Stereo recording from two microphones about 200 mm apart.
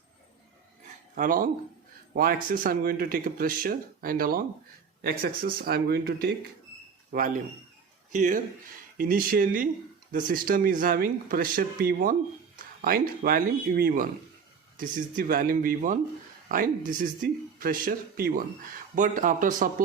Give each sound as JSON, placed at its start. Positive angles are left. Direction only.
{"t": 1.1, "sound": "speech", "side_deg": -45}